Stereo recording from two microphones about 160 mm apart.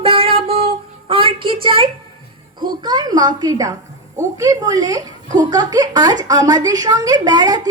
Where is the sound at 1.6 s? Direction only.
35° right (ahead or behind).